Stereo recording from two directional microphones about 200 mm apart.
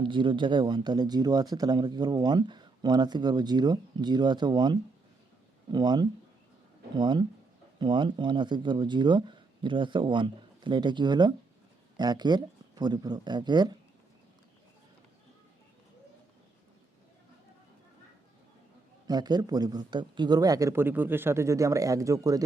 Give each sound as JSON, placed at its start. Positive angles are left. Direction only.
{"t": 0.0, "sound": "speech", "side_deg": -25}
{"t": 19.0, "sound": "a man's voice", "side_deg": -20}